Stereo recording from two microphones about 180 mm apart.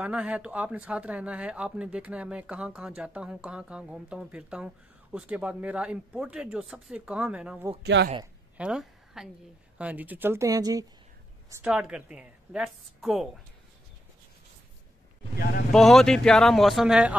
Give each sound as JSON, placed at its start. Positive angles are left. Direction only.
{"t": 0.0, "sound": "speech", "side_deg": -5}
{"t": 7.8, "sound": "a woman's voice", "side_deg": -70}
{"t": 8.5, "sound": "a woman's voice", "side_deg": -5}
{"t": 11.6, "sound": "a woman's voice", "side_deg": -5}
{"t": 15.7, "sound": "a woman's voice", "side_deg": 0}